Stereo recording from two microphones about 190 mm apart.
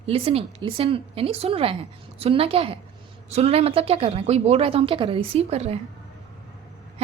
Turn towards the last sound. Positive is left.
turn(degrees=-35)  # may be behind; listen again after turning